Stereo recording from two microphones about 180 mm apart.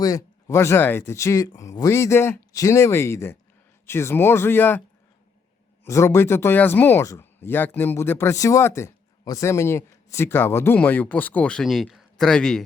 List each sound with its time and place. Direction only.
0.0 s speech: 20° left (ahead or behind)
5.8 s speech: 15° left (ahead or behind)